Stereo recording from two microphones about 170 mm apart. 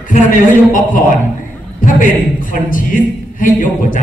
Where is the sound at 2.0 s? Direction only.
55° left (ahead or behind).